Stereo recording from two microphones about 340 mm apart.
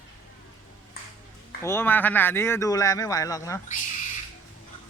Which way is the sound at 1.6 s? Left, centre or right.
Centre.